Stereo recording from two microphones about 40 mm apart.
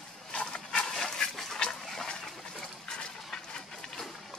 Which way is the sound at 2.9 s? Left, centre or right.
Centre.